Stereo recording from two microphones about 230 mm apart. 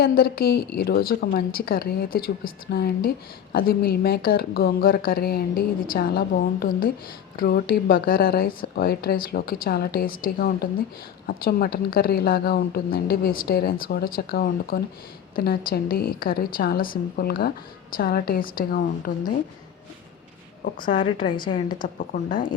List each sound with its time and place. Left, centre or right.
0.0 s a woman's voice: left
21.0 s a woman's voice: left
21.7 s a woman's voice: left